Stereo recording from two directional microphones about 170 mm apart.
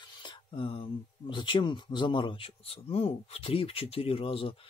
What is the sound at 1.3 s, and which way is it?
Speech, 30° left (ahead or behind).